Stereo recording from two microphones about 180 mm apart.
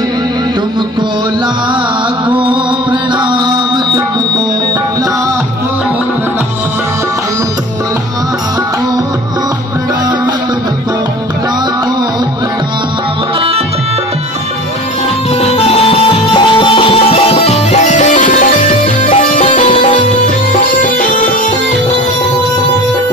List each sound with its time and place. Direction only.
2.2 s music: 25° right (ahead or behind)
15.4 s music: 35° left (ahead or behind)